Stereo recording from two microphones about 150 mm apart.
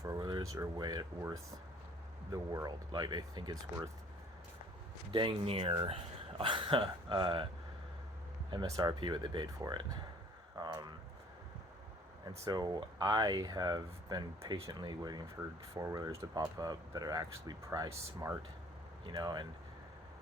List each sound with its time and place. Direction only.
0.0 s speech: 25° right (ahead or behind)
5.1 s speech: 35° right (ahead or behind)
8.4 s speech: 30° right (ahead or behind)
12.5 s speech: 25° right (ahead or behind)